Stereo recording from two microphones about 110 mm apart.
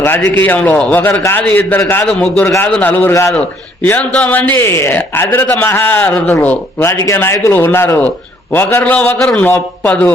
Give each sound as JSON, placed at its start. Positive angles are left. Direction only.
{"t": 0.0, "sound": "a man's voice", "side_deg": 20}
{"t": 2.0, "sound": "a man's voice", "side_deg": 5}
{"t": 3.1, "sound": "speech", "side_deg": 30}
{"t": 3.8, "sound": "a man's voice", "side_deg": 15}
{"t": 9.1, "sound": "a man's voice", "side_deg": 5}
{"t": 9.4, "sound": "a man's voice", "side_deg": 15}